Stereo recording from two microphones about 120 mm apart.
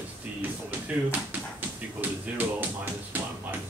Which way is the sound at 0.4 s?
10° right (ahead or behind).